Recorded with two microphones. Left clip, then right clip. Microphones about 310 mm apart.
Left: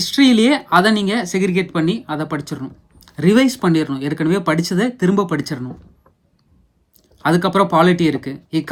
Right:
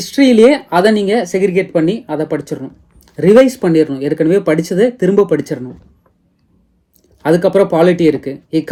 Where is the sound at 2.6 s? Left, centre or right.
Right.